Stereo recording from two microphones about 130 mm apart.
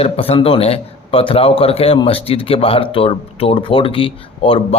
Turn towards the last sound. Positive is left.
turn(degrees=45)  # may be behind; listen again after turning